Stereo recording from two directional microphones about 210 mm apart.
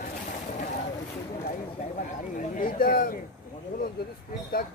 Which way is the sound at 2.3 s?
40° left (ahead or behind).